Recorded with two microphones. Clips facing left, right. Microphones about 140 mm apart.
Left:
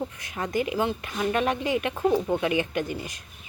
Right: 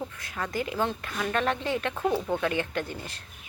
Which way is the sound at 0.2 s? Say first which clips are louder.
Left 4 dB; 20° left (ahead or behind).